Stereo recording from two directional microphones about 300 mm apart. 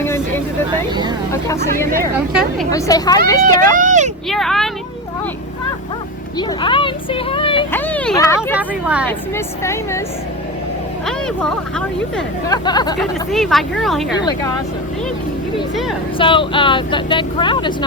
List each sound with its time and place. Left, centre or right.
2.6 s speech: centre
3.8 s speech: right
4.3 s speech: centre
6.3 s speech: centre
7.8 s a sound: centre
8.4 s speech: centre
9.0 s speech: centre
11.0 s speech: centre
12.5 s speech: centre
13.0 s speech: centre
16.1 s speech: centre